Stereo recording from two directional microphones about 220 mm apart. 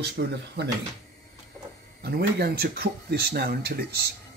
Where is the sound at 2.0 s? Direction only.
45° right (ahead or behind).